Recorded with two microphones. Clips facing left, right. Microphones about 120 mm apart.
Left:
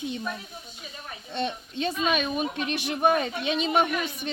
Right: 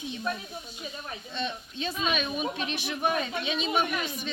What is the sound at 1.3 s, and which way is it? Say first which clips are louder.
Speech: left 5 dB; 55° left (ahead or behind).